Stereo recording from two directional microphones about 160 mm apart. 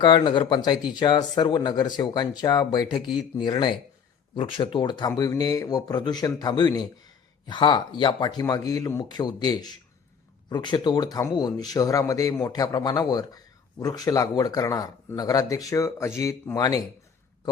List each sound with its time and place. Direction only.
0.0 s speech: 30° left (ahead or behind)